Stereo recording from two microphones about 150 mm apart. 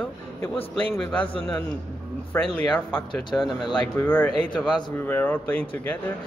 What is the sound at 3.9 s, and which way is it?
Speech, 10° left (ahead or behind).